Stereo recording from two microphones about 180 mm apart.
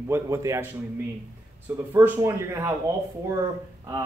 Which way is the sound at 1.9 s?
15° right (ahead or behind).